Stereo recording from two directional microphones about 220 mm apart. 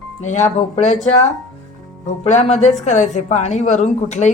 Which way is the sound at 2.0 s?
30° left (ahead or behind).